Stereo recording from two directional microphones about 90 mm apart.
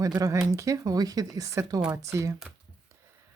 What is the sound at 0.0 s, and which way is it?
Speech, 40° right (ahead or behind).